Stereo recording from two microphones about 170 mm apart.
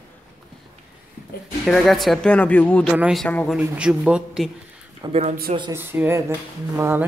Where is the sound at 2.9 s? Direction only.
Centre (ahead or behind).